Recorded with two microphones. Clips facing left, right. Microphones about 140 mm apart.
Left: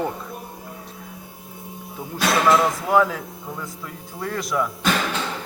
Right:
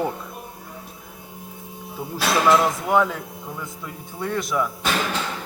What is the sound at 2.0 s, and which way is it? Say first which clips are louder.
Speech: left 1 dB; centre (ahead or behind).